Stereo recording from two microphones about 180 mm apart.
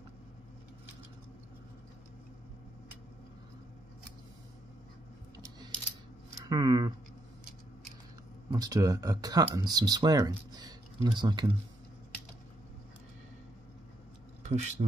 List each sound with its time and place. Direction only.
6.5 s scissors: 20° right (ahead or behind)
8.5 s speech: 20° right (ahead or behind)
14.4 s speech: 40° right (ahead or behind)